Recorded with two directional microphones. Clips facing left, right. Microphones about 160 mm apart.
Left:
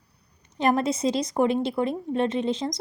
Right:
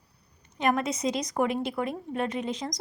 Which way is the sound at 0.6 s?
30° left (ahead or behind).